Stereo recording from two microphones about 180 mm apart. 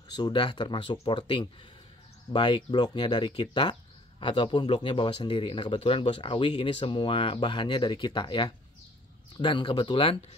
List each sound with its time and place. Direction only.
0.1 s speech: 25° left (ahead or behind)